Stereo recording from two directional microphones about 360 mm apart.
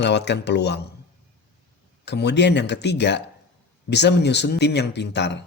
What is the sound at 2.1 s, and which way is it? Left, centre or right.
Speech, left.